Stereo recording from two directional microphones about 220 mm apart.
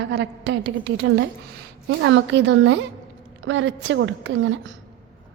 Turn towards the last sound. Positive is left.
turn(degrees=-60)  # may be behind; listen again after turning